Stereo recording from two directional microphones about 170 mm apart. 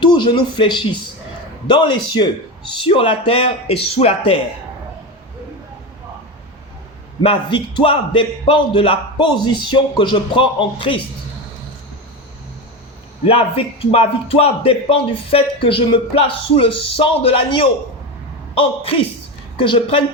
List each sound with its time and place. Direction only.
0.0 s speech: 25° left (ahead or behind)
7.2 s a man's voice: 30° left (ahead or behind)
13.2 s a man's voice: 35° left (ahead or behind)